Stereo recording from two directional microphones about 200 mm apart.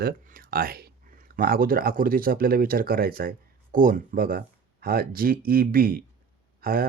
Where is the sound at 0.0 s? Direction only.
45° right (ahead or behind).